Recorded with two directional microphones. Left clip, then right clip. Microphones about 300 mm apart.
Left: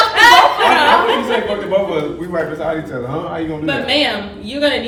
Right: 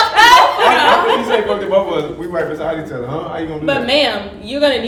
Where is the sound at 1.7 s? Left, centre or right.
Centre.